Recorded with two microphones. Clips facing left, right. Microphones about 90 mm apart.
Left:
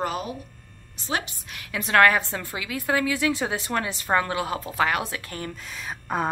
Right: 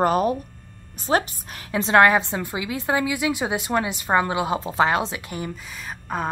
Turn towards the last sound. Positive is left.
turn(degrees=0)  # may be behind; listen again after turning